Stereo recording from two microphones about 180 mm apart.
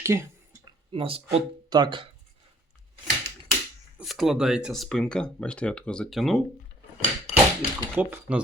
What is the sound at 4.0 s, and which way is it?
Speech, centre (ahead or behind).